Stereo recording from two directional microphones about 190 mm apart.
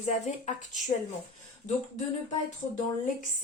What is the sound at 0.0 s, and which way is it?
Speech, 40° left (ahead or behind).